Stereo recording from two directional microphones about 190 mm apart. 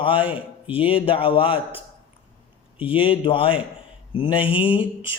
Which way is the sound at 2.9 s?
30° left (ahead or behind).